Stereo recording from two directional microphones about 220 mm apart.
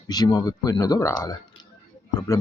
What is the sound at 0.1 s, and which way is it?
Speech, 20° left (ahead or behind).